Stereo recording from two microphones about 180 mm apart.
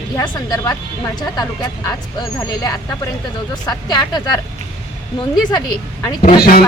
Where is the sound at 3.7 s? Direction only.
20° left (ahead or behind).